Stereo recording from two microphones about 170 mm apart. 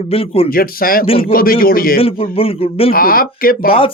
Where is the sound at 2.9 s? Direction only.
60° left (ahead or behind).